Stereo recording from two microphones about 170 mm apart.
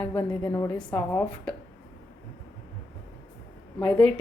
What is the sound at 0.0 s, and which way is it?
A woman's voice, 10° left (ahead or behind).